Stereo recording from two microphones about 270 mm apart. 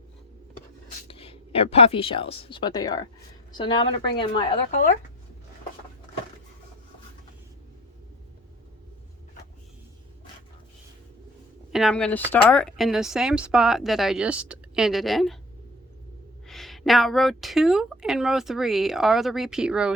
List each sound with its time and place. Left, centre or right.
1.0 s speech: left
11.7 s speech: centre
16.5 s speech: centre